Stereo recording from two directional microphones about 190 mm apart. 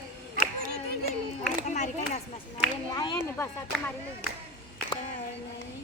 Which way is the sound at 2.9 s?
20° left (ahead or behind).